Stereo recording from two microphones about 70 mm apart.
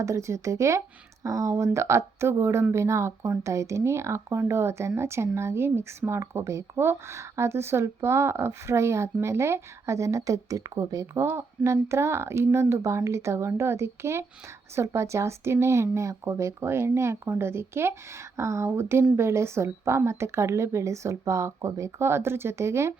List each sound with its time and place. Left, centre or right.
0.0 s speech: right
11.3 s speech: right